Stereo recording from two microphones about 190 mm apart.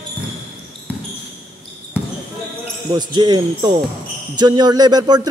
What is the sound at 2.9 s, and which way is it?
Speech, 20° right (ahead or behind).